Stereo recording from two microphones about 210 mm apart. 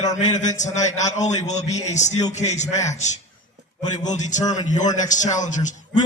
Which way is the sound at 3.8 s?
35° left (ahead or behind).